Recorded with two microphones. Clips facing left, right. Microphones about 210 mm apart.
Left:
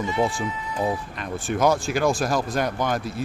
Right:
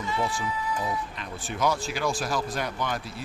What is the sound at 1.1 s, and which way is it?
Speech, 50° left (ahead or behind).